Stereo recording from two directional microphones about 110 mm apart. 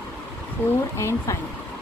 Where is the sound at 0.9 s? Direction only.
25° left (ahead or behind).